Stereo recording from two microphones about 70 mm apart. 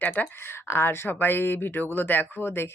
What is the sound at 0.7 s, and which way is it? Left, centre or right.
Speech, left.